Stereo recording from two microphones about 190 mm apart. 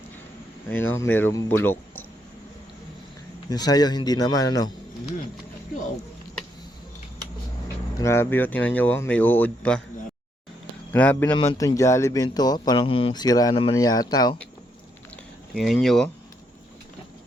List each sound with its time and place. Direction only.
0.7 s speech: 10° left (ahead or behind)
3.5 s speech: 20° left (ahead or behind)
7.9 s speech: 15° left (ahead or behind)
10.9 s speech: 10° left (ahead or behind)
15.5 s speech: centre (ahead or behind)